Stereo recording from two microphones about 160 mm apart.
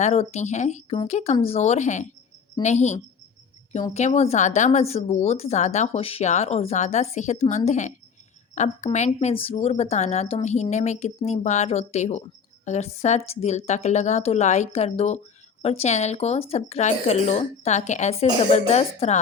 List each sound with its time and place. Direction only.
0.0 s speech: 40° left (ahead or behind)
9.0 s speech: 35° left (ahead or behind)